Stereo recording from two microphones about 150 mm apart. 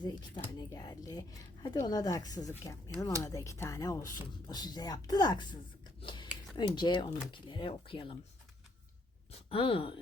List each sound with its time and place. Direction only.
0.0 s speech: 30° left (ahead or behind)
6.0 s a sound: 30° left (ahead or behind)
6.6 s speech: 30° left (ahead or behind)
9.5 s speech: 35° left (ahead or behind)